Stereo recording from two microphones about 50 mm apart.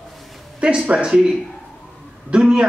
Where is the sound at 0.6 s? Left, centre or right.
Centre.